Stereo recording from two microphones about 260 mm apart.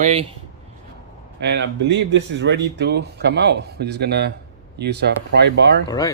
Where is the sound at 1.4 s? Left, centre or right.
Right.